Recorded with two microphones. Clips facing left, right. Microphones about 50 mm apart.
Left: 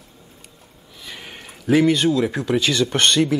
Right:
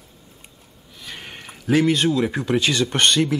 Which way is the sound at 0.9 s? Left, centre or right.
Centre.